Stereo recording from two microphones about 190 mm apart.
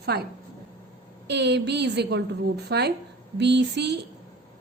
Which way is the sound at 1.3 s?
65° right (ahead or behind).